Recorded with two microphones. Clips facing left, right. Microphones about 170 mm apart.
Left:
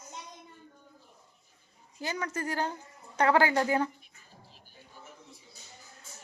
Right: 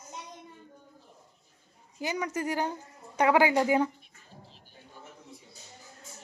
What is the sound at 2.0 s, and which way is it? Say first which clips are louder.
Speech: right 3 dB; 15° right (ahead or behind).